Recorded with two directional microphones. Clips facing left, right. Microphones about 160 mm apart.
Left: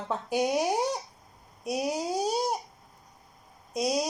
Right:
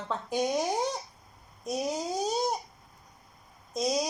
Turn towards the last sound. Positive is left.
turn(degrees=5)  # may be behind; listen again after turning